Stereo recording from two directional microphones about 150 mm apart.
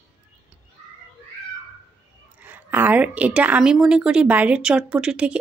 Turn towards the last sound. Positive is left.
turn(degrees=-5)  # may be behind; listen again after turning